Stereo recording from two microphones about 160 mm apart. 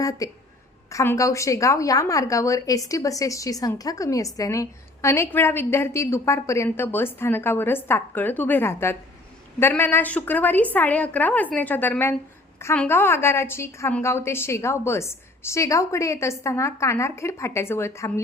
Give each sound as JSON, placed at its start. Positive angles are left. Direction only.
{"t": 0.0, "sound": "a woman's voice", "side_deg": 20}